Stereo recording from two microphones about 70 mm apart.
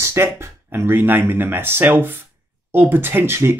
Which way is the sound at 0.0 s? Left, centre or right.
Right.